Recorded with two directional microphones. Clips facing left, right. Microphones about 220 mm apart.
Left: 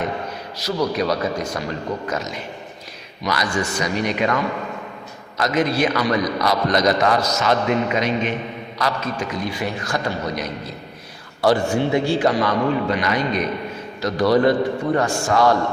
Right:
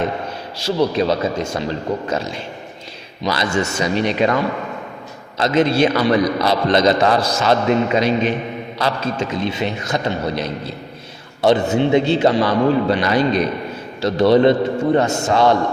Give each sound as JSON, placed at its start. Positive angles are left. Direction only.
{"t": 0.6, "sound": "a man's voice", "side_deg": -25}